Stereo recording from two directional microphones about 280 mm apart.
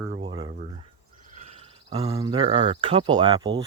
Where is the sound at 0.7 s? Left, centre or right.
Right.